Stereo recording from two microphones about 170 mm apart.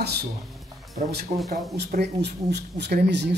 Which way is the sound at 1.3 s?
40° right (ahead or behind).